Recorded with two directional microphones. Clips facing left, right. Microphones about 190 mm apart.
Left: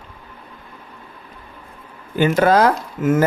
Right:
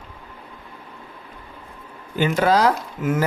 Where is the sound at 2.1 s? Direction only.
50° left (ahead or behind).